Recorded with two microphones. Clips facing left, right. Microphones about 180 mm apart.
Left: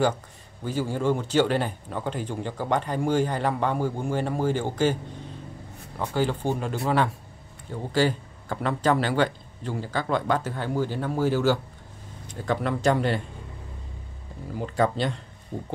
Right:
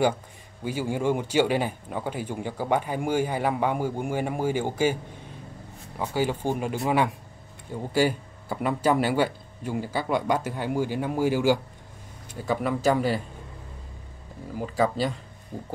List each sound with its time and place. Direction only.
0.7 s speech: 10° right (ahead or behind)
5.9 s speech: 10° right (ahead or behind)
14.8 s speech: 5° right (ahead or behind)